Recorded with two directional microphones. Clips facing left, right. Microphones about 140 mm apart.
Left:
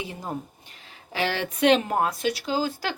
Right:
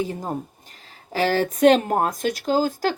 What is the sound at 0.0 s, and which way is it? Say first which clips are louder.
Speech: right 6 dB; 40° right (ahead or behind).